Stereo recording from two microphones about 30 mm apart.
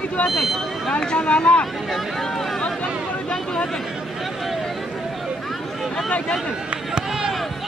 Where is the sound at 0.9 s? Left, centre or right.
Left.